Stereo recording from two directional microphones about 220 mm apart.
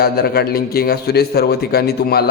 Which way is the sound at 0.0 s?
45° left (ahead or behind).